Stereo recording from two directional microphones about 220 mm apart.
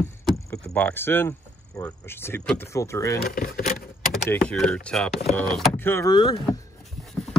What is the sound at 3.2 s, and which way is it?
Speech, 45° left (ahead or behind).